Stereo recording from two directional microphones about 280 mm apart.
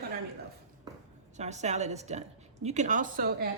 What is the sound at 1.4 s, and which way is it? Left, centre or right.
A woman's voice, right.